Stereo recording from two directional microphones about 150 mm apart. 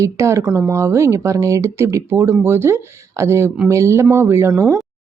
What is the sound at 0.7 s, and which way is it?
A woman's voice, 20° right (ahead or behind).